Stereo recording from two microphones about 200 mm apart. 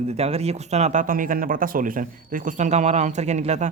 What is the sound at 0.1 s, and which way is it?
Speech, 30° right (ahead or behind).